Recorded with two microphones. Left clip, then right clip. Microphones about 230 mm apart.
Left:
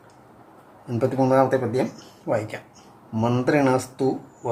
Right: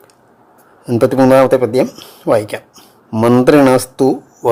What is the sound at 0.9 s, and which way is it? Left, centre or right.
Speech, right.